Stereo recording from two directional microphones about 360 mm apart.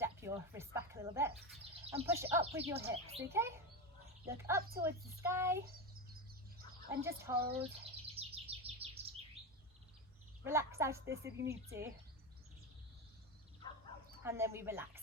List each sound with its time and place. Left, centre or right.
0.0 s speech: centre
7.3 s bird: right
10.4 s speech: centre
11.3 s speech: right
14.3 s speech: centre